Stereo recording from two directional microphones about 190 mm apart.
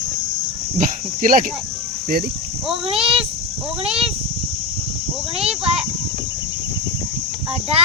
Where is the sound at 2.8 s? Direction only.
30° right (ahead or behind).